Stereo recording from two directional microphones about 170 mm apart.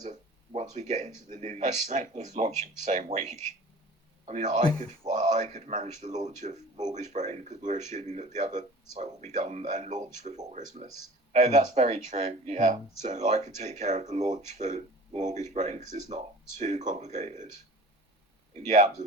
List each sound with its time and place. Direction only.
0.0 s a man's voice: 45° right (ahead or behind)